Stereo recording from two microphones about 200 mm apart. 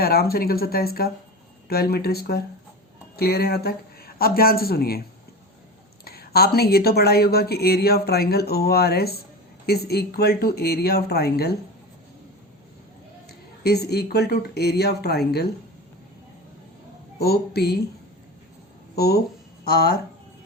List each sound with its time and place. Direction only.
0.0 s speech: 50° left (ahead or behind)
6.1 s speech: 50° left (ahead or behind)
13.2 s a woman's voice: 55° left (ahead or behind)
17.2 s speech: 50° left (ahead or behind)
18.9 s speech: 50° left (ahead or behind)